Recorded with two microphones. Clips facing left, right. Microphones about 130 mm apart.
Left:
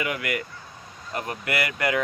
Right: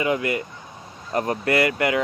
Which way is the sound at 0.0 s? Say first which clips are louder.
Right 5 dB; 25° right (ahead or behind).